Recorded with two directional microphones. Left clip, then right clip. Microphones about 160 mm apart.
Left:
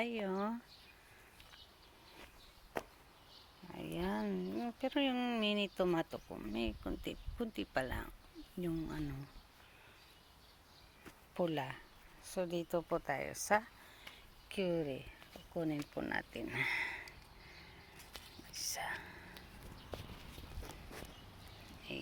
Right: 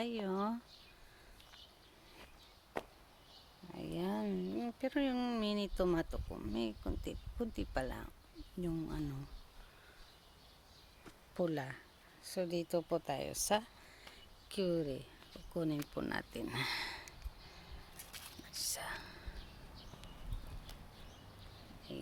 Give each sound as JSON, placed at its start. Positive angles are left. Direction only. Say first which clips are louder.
{"t": 0.0, "sound": "speech", "louder": "even", "side_deg": -20}
{"t": 3.7, "sound": "speech", "louder": "even", "side_deg": -15}
{"t": 11.3, "sound": "speech", "louder": "left 1 dB", "side_deg": -10}
{"t": 15.5, "sound": "speech", "louder": "right 1 dB", "side_deg": -35}
{"t": 18.6, "sound": "whispering", "louder": "left 1 dB", "side_deg": -15}